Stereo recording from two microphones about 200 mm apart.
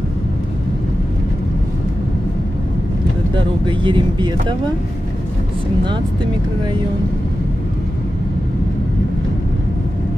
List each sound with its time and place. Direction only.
3.3 s speech: 25° right (ahead or behind)